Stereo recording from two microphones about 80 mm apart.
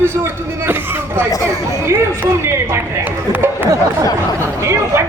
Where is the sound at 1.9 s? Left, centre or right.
Right.